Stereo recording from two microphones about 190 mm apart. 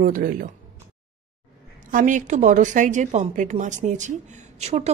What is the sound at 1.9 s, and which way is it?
A woman's voice, 45° right (ahead or behind).